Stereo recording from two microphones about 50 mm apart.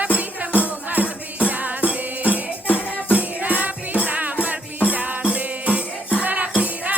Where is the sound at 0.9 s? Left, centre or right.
Right.